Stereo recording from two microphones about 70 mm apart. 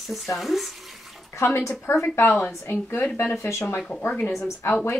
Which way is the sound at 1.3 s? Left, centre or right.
Left.